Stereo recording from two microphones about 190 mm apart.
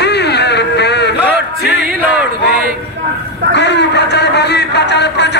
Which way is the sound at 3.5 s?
65° left (ahead or behind).